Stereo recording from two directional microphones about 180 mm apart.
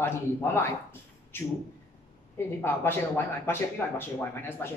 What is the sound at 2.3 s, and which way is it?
Speech, 10° left (ahead or behind).